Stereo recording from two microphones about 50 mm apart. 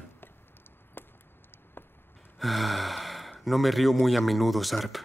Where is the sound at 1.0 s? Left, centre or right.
Left.